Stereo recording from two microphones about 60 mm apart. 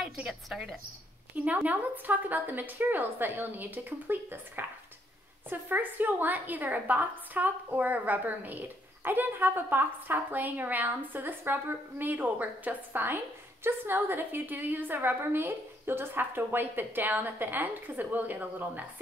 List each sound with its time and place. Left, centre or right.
0.3 s a woman's voice: centre
1.3 s a woman's voice: right